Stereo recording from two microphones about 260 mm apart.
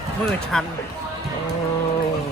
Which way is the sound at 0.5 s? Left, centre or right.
Centre.